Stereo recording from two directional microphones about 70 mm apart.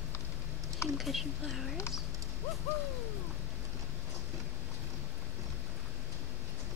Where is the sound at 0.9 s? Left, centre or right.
Centre.